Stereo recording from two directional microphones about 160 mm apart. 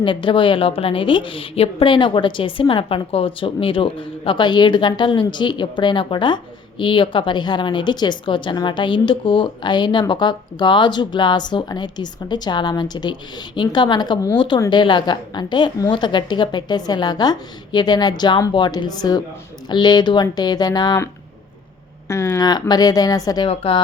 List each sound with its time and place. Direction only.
0.0 s a woman's voice: 30° left (ahead or behind)
22.1 s a woman's voice: 15° left (ahead or behind)
23.5 s speech: 35° left (ahead or behind)